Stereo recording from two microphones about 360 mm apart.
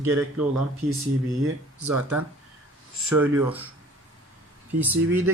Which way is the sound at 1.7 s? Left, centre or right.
Right.